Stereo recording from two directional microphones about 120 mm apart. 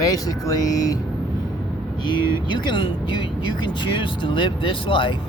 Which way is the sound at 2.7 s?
45° left (ahead or behind).